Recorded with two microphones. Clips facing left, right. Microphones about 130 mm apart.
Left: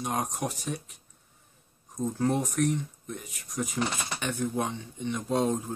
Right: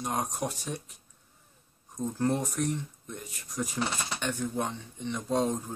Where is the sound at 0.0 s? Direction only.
Centre (ahead or behind).